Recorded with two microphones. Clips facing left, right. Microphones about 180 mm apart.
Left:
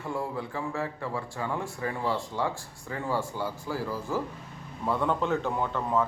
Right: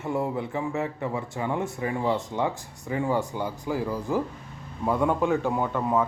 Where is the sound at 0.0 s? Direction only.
20° right (ahead or behind).